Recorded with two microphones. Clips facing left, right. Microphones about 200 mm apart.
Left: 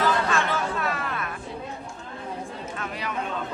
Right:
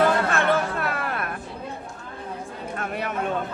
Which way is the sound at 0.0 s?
60° right (ahead or behind).